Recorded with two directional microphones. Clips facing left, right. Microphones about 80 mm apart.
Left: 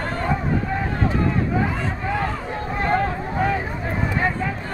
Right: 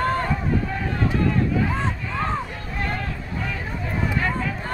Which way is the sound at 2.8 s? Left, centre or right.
Left.